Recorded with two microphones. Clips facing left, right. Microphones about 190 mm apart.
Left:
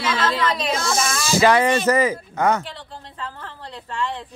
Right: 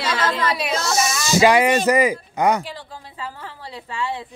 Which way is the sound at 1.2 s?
15° right (ahead or behind).